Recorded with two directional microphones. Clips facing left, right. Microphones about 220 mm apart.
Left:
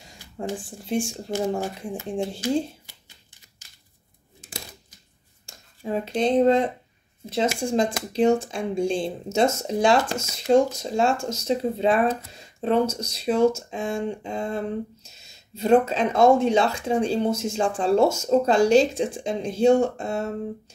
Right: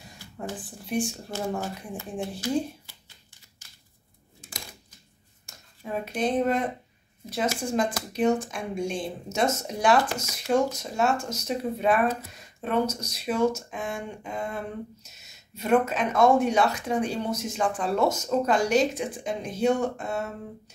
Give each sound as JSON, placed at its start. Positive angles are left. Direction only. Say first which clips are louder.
{"t": 0.4, "sound": "speech", "louder": "left 5 dB", "side_deg": 25}
{"t": 5.5, "sound": "speech", "louder": "left 5 dB", "side_deg": 30}
{"t": 7.7, "sound": "speech", "louder": "left 4 dB", "side_deg": 25}